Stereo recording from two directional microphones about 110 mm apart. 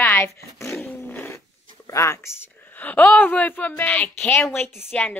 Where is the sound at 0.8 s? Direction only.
15° left (ahead or behind).